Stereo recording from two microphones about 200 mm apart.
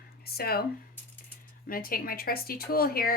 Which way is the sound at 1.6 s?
45° left (ahead or behind).